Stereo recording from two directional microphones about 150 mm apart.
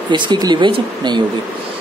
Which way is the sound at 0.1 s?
30° right (ahead or behind).